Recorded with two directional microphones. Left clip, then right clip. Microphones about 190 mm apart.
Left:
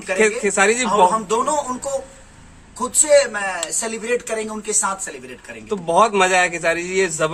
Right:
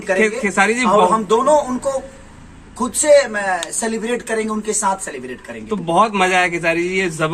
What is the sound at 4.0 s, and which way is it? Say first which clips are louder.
A man's voice: even; 15° left (ahead or behind).